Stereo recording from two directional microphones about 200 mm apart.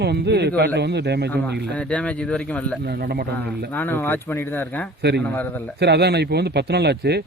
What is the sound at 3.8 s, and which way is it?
Speech, 10° left (ahead or behind).